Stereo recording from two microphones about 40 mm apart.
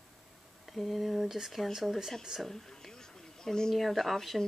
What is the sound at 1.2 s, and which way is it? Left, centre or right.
Speech, centre.